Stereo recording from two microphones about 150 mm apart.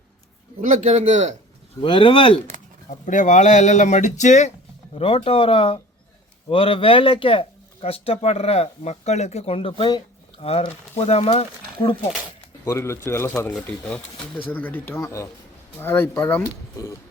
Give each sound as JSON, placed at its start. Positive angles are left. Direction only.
{"t": 0.6, "sound": "speech", "side_deg": -55}
{"t": 1.8, "sound": "speech", "side_deg": 35}
{"t": 3.1, "sound": "speech", "side_deg": 55}
{"t": 4.9, "sound": "speech", "side_deg": 40}
{"t": 12.6, "sound": "speech", "side_deg": 20}